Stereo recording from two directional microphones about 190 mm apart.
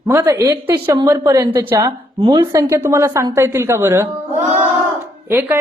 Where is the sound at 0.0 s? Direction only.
15° right (ahead or behind).